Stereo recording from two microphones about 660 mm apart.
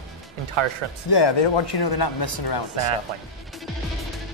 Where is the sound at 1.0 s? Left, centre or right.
Left.